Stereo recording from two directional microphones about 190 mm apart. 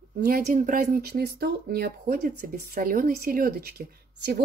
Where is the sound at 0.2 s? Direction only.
50° right (ahead or behind).